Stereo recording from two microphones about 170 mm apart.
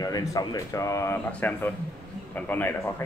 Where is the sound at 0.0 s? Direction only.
20° left (ahead or behind).